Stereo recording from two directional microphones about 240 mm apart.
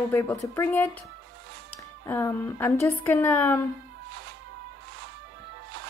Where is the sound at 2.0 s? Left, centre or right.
Centre.